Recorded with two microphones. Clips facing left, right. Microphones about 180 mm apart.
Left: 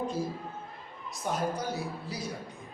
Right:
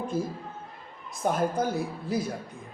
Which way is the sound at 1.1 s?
50° right (ahead or behind).